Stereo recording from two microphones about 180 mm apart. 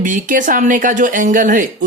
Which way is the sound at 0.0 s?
45° right (ahead or behind).